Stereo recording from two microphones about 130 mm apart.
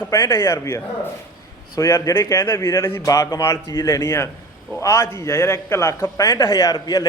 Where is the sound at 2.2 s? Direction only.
15° left (ahead or behind).